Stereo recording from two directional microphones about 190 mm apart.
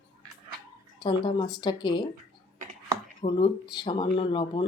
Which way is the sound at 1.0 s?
25° left (ahead or behind).